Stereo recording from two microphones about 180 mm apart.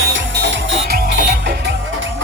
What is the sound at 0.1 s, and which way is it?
Music, 90° right.